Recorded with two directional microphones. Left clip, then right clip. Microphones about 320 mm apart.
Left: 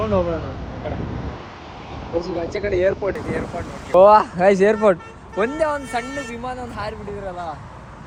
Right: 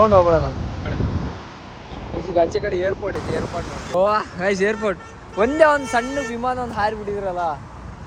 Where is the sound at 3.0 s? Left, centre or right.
Centre.